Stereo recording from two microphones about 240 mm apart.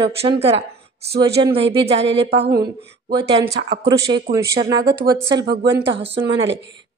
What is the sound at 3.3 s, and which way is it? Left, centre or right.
Speech, right.